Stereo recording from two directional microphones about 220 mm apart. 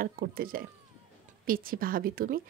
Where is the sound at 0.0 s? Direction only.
40° right (ahead or behind).